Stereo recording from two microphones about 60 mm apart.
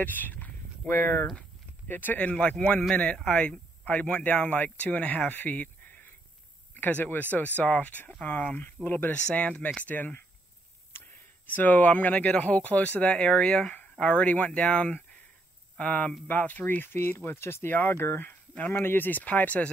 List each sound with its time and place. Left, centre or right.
0.0 s a sound: left
1.9 s speech: left
2.9 s speech: centre; by 9.1 s left
9.1 s speech: left
11.4 s speech: left